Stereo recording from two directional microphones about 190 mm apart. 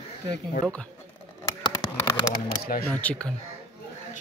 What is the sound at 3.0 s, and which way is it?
Speech, 5° left (ahead or behind).